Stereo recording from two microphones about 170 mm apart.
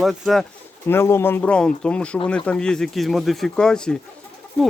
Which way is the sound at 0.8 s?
15° left (ahead or behind).